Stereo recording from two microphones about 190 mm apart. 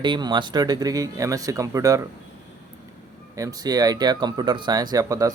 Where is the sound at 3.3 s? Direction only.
20° right (ahead or behind).